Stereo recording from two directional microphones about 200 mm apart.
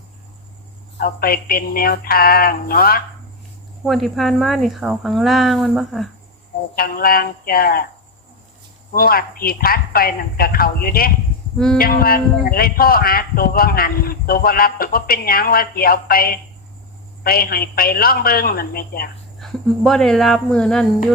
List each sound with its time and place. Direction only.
0.9 s speech: 50° left (ahead or behind)
3.8 s speech: centre (ahead or behind)
6.7 s speech: 45° left (ahead or behind)
8.9 s speech: 45° left (ahead or behind)
11.5 s speech: 5° left (ahead or behind)
11.8 s speech: 50° left (ahead or behind)
19.4 s speech: centre (ahead or behind)